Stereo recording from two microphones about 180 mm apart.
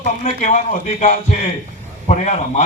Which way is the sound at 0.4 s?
45° left (ahead or behind).